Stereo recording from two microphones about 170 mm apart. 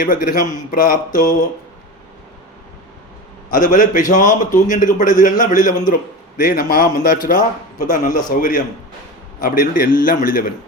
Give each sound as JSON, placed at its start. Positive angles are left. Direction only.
{"t": 0.0, "sound": "a man's voice", "side_deg": 55}
{"t": 3.5, "sound": "a man's voice", "side_deg": 50}